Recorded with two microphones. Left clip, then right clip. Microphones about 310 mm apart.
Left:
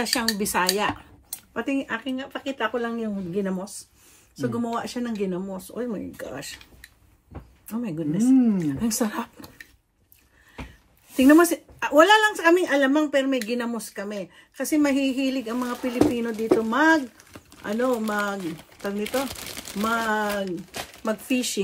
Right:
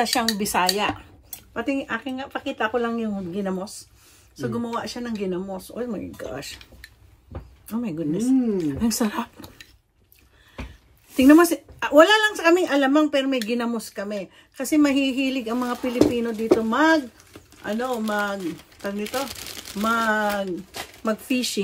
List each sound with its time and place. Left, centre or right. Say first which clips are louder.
0.0 s speech: right 3 dB; centre
7.7 s speech: right 2 dB; centre
11.1 s speech: right 2 dB; centre
19.0 s speech: left 1 dB; centre
20.1 s speech: right 2 dB; centre